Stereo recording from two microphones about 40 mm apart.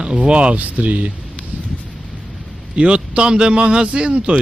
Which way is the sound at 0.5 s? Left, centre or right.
Right.